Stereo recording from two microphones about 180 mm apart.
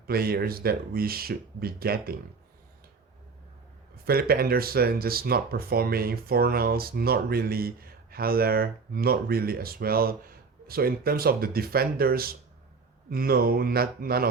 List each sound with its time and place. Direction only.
0.1 s speech: 55° right (ahead or behind)
4.0 s speech: 55° right (ahead or behind)